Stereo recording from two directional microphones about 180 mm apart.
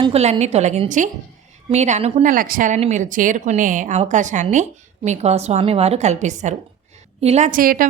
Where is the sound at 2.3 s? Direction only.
50° right (ahead or behind).